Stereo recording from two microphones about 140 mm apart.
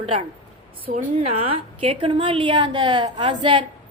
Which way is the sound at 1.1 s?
45° right (ahead or behind).